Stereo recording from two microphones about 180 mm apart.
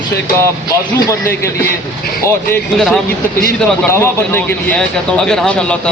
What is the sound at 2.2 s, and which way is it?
Speech, 15° left (ahead or behind).